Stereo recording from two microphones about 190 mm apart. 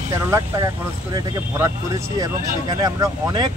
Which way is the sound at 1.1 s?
15° right (ahead or behind).